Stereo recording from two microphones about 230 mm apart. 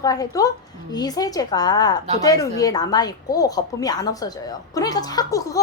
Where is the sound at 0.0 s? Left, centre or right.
Centre.